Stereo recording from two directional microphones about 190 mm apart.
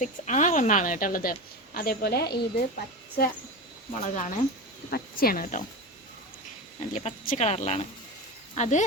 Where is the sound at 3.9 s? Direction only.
40° left (ahead or behind).